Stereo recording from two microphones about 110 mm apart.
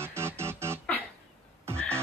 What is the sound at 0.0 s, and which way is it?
Music, 25° right (ahead or behind).